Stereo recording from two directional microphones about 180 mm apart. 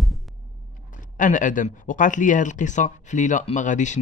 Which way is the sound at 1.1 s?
45° left (ahead or behind).